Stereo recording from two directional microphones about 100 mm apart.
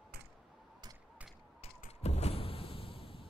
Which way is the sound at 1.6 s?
90° left.